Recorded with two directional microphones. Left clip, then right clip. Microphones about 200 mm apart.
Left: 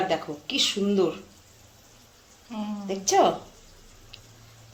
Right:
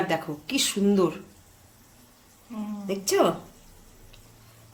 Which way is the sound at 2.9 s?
50° right (ahead or behind).